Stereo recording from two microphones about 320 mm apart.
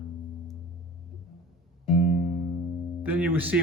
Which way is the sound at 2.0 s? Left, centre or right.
Left.